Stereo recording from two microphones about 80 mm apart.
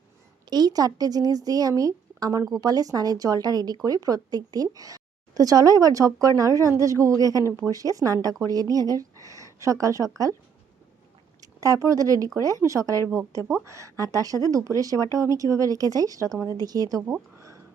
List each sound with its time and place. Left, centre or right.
0.5 s a woman's voice: right
11.3 s speech: right